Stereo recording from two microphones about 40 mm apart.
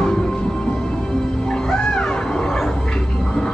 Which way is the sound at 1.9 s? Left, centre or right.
Centre.